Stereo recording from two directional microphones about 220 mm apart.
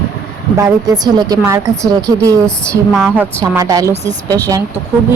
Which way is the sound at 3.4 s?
15° right (ahead or behind).